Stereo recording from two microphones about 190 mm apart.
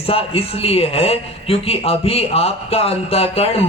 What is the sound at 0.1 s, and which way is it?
A man's voice, 30° left (ahead or behind).